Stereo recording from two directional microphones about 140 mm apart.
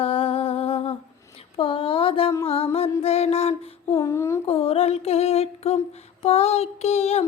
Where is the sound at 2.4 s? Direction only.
45° left (ahead or behind).